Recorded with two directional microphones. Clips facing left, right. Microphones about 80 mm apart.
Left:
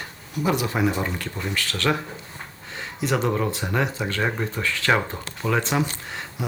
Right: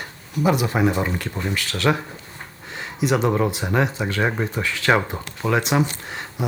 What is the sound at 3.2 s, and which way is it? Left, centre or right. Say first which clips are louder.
Speech: right 3 dB; centre.